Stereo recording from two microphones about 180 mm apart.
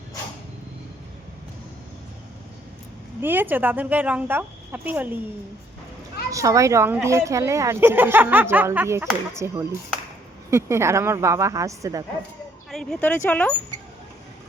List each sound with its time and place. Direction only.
3.2 s a woman's voice: 10° right (ahead or behind)
6.3 s a woman's voice: 15° right (ahead or behind)
12.7 s speech: 5° left (ahead or behind)